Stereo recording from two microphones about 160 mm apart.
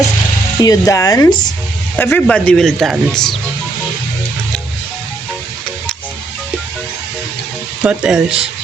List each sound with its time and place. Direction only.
0.6 s speech: 20° left (ahead or behind)
2.0 s speech: 10° left (ahead or behind)
7.9 s speech: 5° right (ahead or behind)